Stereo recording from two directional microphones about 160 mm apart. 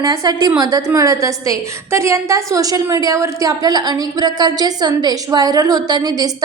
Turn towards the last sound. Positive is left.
turn(degrees=-25)  # may be behind; listen again after turning